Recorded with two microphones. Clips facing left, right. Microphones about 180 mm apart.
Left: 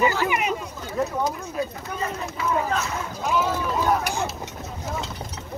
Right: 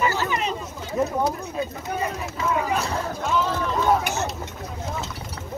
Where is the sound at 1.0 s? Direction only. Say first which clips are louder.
Right 2 dB; 10° right (ahead or behind).